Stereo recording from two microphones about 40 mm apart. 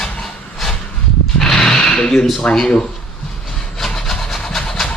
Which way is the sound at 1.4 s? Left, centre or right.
Centre.